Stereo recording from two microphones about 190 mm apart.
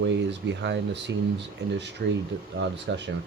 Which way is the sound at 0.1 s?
70° right (ahead or behind).